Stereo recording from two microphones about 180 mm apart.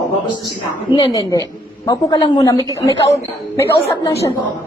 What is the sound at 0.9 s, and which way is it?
A woman's voice, 25° left (ahead or behind).